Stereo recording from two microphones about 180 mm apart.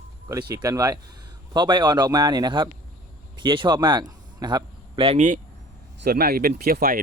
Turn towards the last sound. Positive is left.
turn(degrees=-55)  # may be behind; listen again after turning